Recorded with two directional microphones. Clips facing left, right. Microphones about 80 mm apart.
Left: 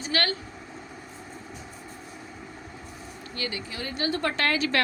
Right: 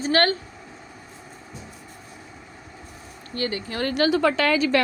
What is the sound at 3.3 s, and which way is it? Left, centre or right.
Speech, right.